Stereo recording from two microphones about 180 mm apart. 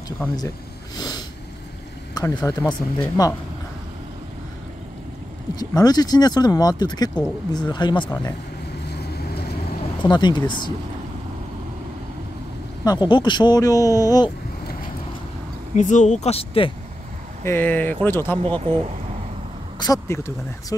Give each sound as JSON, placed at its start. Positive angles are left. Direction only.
{"t": 0.2, "sound": "speech", "side_deg": 10}
{"t": 0.9, "sound": "sniff", "side_deg": 20}
{"t": 2.1, "sound": "speech", "side_deg": 15}
{"t": 5.6, "sound": "speech", "side_deg": 20}
{"t": 8.8, "sound": "vehicle", "side_deg": 65}
{"t": 10.0, "sound": "speech", "side_deg": 25}
{"t": 12.8, "sound": "speech", "side_deg": 25}
{"t": 15.7, "sound": "speech", "side_deg": 45}
{"t": 17.5, "sound": "speech", "side_deg": 10}